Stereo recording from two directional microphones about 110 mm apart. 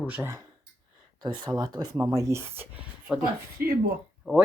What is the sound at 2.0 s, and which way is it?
Speech, 25° right (ahead or behind).